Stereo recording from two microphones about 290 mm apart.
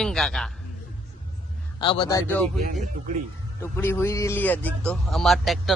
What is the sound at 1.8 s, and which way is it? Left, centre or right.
Speech, centre.